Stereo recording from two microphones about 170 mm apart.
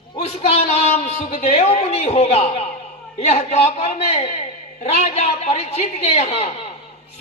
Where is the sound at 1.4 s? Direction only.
35° left (ahead or behind).